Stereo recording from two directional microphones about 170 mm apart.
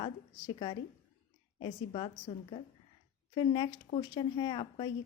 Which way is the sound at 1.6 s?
30° left (ahead or behind).